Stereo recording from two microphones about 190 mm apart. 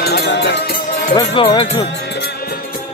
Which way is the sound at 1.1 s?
25° left (ahead or behind).